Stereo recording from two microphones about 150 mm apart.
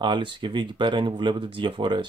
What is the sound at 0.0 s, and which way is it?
Speech, 35° right (ahead or behind).